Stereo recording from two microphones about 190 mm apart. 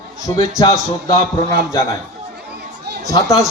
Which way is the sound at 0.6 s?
25° left (ahead or behind).